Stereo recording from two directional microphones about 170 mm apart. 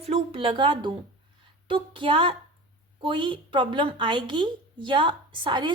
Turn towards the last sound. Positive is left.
turn(degrees=-30)  # may be behind; listen again after turning